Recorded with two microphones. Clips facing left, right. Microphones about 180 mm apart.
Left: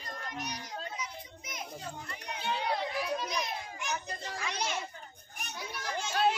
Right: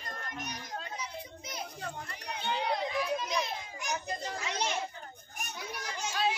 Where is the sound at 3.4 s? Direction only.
40° right (ahead or behind).